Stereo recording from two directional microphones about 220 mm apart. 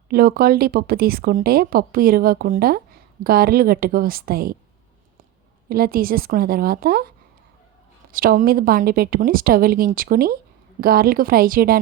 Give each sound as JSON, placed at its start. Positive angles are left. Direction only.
{"t": 0.1, "sound": "a woman's voice", "side_deg": -40}
{"t": 5.6, "sound": "a woman's voice", "side_deg": -40}
{"t": 8.1, "sound": "a woman's voice", "side_deg": -40}